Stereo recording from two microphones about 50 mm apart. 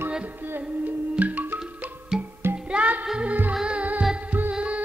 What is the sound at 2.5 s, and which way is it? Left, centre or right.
Music, right.